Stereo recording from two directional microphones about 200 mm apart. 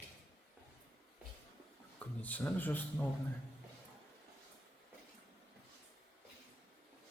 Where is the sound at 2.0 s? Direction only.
10° left (ahead or behind).